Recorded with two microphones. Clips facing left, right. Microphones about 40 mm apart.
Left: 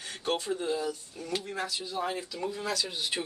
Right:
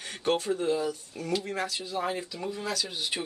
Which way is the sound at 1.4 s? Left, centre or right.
Right.